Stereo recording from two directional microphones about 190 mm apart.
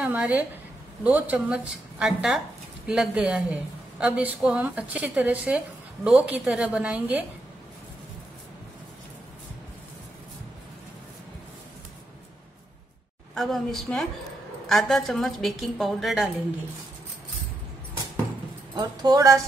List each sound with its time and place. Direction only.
0.0 s a woman's voice: 5° right (ahead or behind)
13.3 s a woman's voice: centre (ahead or behind)
18.8 s speech: 20° right (ahead or behind)